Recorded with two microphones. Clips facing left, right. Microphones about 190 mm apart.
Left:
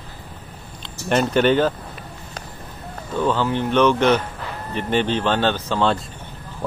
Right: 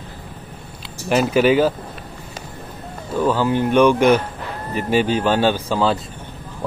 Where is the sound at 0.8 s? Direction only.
5° right (ahead or behind).